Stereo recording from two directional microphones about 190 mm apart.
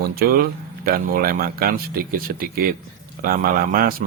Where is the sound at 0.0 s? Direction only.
50° right (ahead or behind).